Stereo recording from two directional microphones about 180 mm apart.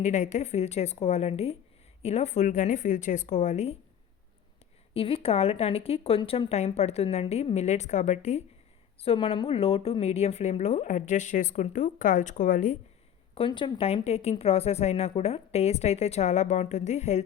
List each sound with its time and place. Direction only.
0.0 s speech: 40° left (ahead or behind)
4.9 s speech: 30° left (ahead or behind)
13.3 s speech: 30° left (ahead or behind)